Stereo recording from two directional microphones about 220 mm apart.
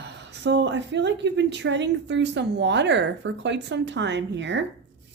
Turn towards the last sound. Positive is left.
turn(degrees=-55)  # may be behind; listen again after turning